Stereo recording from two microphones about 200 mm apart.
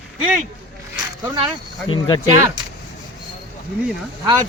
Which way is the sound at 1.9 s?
25° left (ahead or behind).